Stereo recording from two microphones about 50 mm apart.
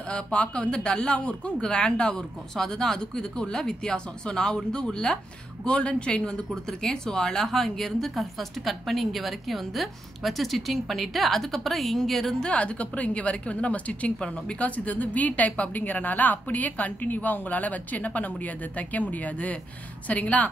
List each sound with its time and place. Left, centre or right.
0.1 s speech: left; by 12.4 s centre
12.4 s a woman's voice: left